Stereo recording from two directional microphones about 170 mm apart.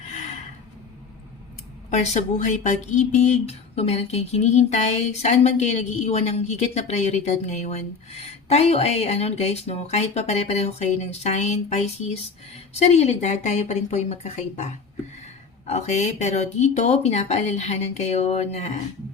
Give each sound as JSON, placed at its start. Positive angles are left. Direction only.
{"t": 1.9, "sound": "speech", "side_deg": 40}